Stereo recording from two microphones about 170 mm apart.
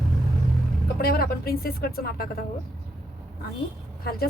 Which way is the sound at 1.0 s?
65° left (ahead or behind).